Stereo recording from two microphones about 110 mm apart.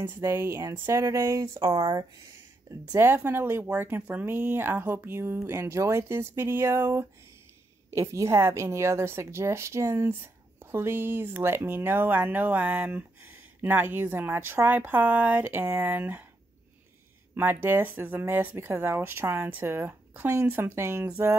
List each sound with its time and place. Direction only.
0.0 s a woman's voice: 25° right (ahead or behind)
2.9 s a woman's voice: 20° right (ahead or behind)
17.3 s a woman's voice: 20° right (ahead or behind)